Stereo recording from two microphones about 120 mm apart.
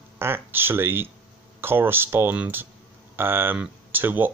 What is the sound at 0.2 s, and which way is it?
Speech, 20° right (ahead or behind).